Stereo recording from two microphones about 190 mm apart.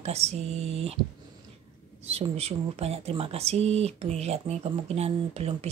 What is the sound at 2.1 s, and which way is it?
Speech, 30° right (ahead or behind).